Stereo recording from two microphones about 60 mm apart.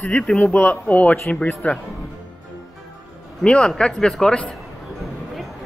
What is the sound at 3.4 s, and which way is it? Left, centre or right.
Speech, centre.